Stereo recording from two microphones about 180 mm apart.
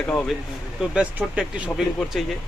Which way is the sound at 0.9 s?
5° right (ahead or behind).